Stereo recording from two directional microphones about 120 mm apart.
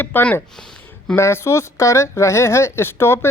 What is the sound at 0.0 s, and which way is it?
Speech, 15° left (ahead or behind).